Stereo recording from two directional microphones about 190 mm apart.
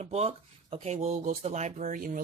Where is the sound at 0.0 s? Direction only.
35° right (ahead or behind).